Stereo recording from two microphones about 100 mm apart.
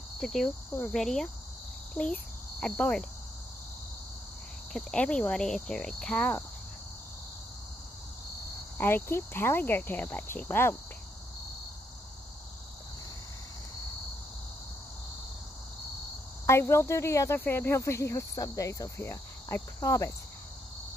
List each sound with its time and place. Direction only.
0.2 s cricket: 5° left (ahead or behind)
0.9 s speech: 5° left (ahead or behind)
2.0 s cricket: 15° left (ahead or behind)
4.7 s cricket: 10° left (ahead or behind)
8.7 s speech: 20° left (ahead or behind)
16.4 s speech: 25° left (ahead or behind)